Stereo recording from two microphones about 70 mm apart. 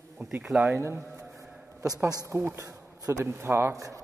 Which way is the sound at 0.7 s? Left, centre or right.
Right.